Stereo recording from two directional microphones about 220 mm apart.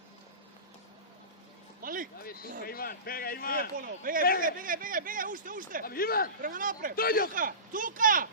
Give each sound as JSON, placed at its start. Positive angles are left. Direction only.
{"t": 1.8, "sound": "a sound", "side_deg": -40}
{"t": 2.2, "sound": "a man's voice", "side_deg": 45}
{"t": 3.8, "sound": "speech", "side_deg": -40}
{"t": 4.2, "sound": "a man's voice", "side_deg": 45}
{"t": 4.4, "sound": "speech", "side_deg": -40}
{"t": 5.8, "sound": "a man's voice", "side_deg": 40}
{"t": 6.4, "sound": "speech", "side_deg": -40}
{"t": 6.9, "sound": "a man's voice", "side_deg": 40}
{"t": 7.3, "sound": "speech", "side_deg": -40}